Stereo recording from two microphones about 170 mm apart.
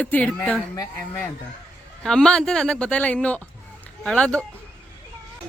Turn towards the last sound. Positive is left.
turn(degrees=5)  # may be behind; listen again after turning